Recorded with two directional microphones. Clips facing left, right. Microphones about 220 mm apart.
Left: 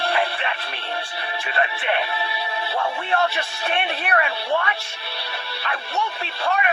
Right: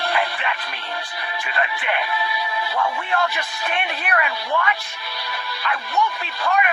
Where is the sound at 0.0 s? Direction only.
30° left (ahead or behind).